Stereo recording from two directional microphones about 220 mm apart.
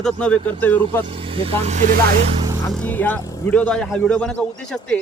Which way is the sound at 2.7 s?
5° left (ahead or behind).